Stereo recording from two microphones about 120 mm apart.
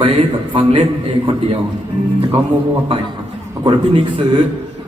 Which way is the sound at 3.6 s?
40° right (ahead or behind).